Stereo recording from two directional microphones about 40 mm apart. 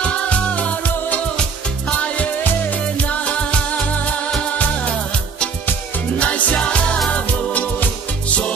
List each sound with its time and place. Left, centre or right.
0.0 s music: left
3.0 s music: left
6.1 s music: left